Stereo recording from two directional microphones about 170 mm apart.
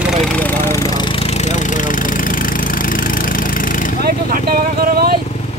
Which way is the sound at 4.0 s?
60° right (ahead or behind).